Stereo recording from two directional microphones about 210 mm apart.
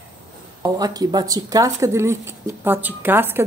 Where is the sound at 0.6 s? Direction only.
20° right (ahead or behind).